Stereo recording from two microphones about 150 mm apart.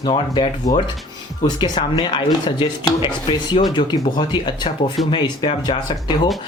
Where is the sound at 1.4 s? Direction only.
30° left (ahead or behind).